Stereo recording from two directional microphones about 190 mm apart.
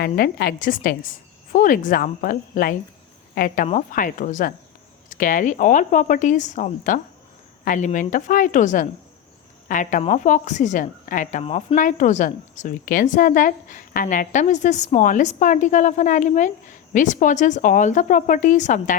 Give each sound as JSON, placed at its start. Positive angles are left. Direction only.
{"t": 0.0, "sound": "a woman's voice", "side_deg": 55}